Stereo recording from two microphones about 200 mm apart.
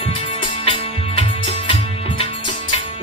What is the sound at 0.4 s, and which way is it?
Music, 25° left (ahead or behind).